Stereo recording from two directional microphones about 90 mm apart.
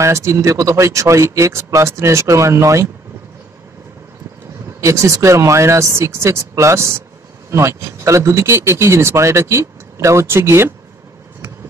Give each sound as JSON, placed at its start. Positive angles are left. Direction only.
{"t": 0.0, "sound": "speech", "side_deg": -35}
{"t": 4.7, "sound": "speech", "side_deg": -35}